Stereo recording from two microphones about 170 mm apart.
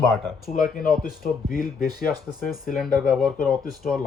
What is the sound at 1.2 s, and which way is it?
Speech, 55° left (ahead or behind).